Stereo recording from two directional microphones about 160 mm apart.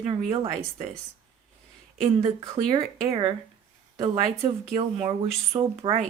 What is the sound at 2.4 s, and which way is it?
Speech, 20° right (ahead or behind).